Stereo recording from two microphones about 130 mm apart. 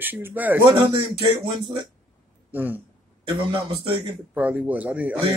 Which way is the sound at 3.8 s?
40° right (ahead or behind).